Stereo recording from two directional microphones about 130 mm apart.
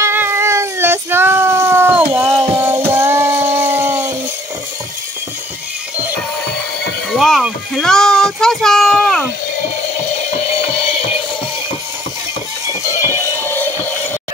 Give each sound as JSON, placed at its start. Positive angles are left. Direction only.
{"t": 0.0, "sound": "cat", "side_deg": -20}
{"t": 2.1, "sound": "a sound", "side_deg": -20}
{"t": 7.2, "sound": "child singing", "side_deg": 0}
{"t": 13.0, "sound": "music", "side_deg": 20}